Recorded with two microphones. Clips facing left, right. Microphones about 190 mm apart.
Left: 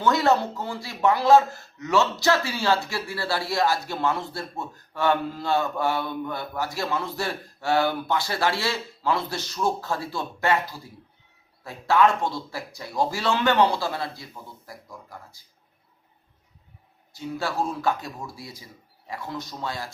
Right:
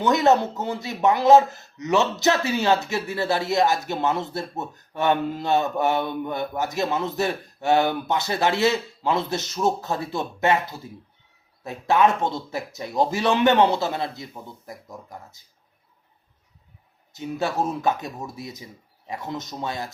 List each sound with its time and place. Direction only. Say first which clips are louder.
0.0 s speech: right 3 dB; 20° right (ahead or behind)
17.1 s speech: right 3 dB; 20° right (ahead or behind)